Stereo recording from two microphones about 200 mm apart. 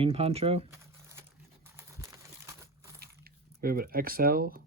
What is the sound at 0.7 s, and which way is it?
Crumpling, 15° right (ahead or behind).